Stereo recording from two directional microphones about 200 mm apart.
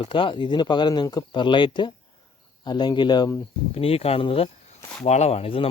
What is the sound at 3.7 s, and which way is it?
Speech, 30° left (ahead or behind).